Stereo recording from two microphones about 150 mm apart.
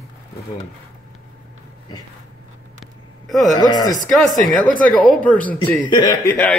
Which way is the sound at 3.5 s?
30° left (ahead or behind).